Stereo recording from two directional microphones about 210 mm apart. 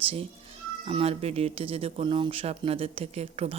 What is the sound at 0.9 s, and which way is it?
Speech, 25° right (ahead or behind).